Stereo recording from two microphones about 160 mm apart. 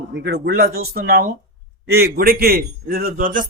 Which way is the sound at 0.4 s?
75° right (ahead or behind).